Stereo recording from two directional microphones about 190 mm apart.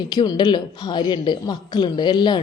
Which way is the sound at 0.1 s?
20° left (ahead or behind).